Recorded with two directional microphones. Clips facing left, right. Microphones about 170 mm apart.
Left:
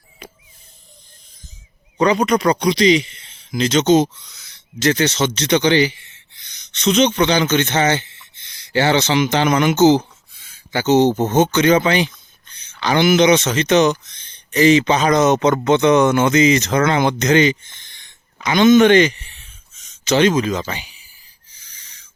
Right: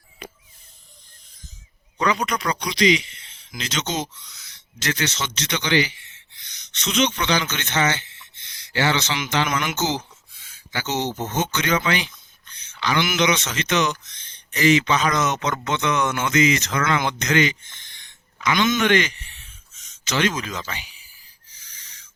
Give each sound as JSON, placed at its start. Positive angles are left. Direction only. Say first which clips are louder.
{"t": 2.0, "sound": "a man's voice", "louder": "left 8 dB", "side_deg": 30}